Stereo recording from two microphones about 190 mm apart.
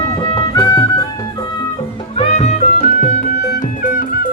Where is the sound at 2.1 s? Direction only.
35° left (ahead or behind).